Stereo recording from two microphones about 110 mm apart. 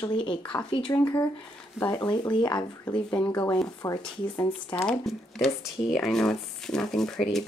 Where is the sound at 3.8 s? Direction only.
30° left (ahead or behind).